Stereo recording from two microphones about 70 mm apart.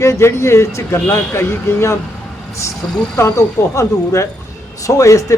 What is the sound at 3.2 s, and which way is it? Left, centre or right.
Speech, left.